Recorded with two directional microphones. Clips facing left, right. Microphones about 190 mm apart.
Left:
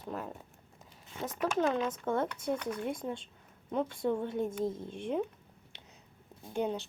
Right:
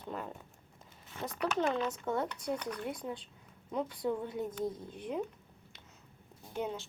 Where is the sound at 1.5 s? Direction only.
20° left (ahead or behind).